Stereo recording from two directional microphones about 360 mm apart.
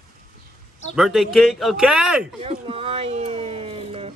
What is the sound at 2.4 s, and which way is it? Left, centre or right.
Speech, centre.